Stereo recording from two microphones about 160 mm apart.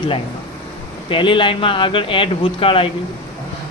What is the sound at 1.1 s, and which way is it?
Speech, 30° left (ahead or behind).